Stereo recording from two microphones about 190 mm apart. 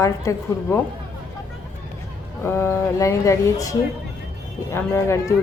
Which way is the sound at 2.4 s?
10° left (ahead or behind).